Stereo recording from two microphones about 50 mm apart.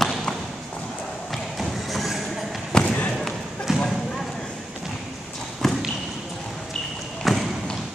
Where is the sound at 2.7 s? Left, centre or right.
Centre.